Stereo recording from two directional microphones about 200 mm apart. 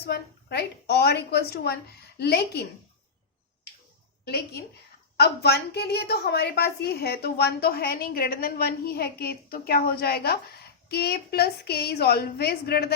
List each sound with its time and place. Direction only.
0.0 s a woman's voice: 55° left (ahead or behind)
4.3 s a woman's voice: 55° left (ahead or behind)